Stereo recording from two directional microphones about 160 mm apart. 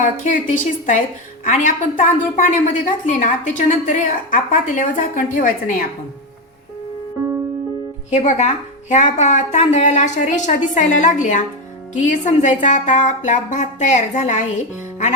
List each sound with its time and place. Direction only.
0.0 s a woman's voice: 50° left (ahead or behind)
8.1 s a woman's voice: 50° left (ahead or behind)